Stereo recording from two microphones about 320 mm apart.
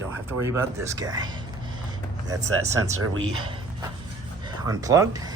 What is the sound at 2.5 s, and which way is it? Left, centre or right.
Speech, right.